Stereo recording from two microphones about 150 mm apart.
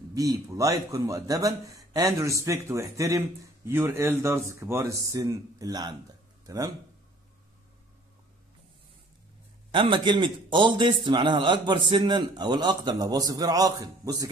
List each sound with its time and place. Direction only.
0.1 s speech: 25° right (ahead or behind)
9.7 s a man's voice: 35° right (ahead or behind)